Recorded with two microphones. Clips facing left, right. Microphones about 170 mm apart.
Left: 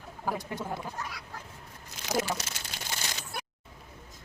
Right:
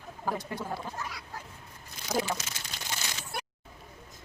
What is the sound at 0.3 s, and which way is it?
Speech, 15° left (ahead or behind).